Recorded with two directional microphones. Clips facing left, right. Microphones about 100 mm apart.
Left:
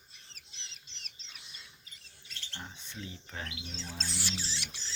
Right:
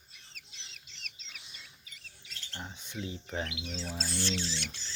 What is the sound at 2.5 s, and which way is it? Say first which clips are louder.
Speech: right 3 dB; 15° right (ahead or behind).